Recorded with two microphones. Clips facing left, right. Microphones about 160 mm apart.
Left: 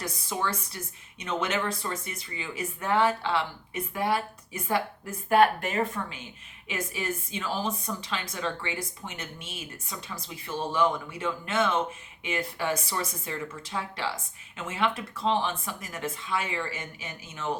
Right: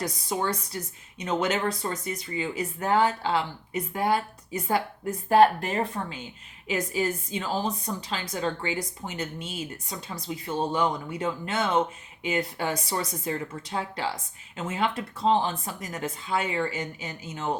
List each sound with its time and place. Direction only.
0.0 s speech: 35° right (ahead or behind)